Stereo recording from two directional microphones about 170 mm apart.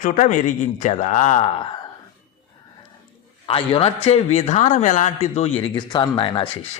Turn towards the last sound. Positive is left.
turn(degrees=30)  # may be behind; listen again after turning